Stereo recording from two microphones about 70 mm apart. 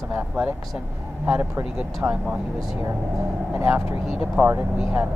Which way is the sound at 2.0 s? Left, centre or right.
Centre.